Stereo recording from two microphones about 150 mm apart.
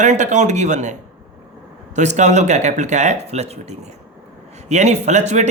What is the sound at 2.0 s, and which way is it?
Speech, 50° right (ahead or behind).